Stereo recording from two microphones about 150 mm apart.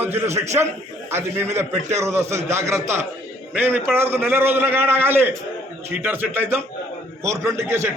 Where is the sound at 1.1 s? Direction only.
15° right (ahead or behind).